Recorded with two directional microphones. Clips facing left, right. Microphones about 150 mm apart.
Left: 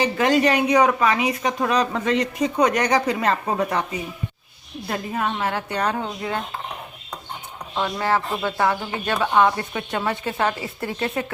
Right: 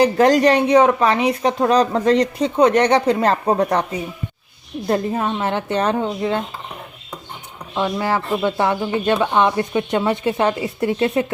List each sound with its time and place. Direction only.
0.0 s speech: 40° right (ahead or behind)
4.9 s speech: 30° right (ahead or behind)
7.8 s speech: 15° right (ahead or behind)